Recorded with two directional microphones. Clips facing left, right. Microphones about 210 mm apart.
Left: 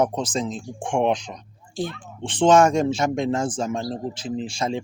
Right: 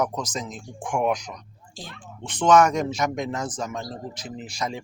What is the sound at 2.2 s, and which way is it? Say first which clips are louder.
Speech: left 2 dB; 30° left (ahead or behind).